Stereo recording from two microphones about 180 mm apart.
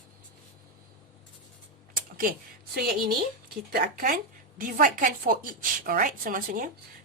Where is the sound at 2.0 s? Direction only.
50° right (ahead or behind).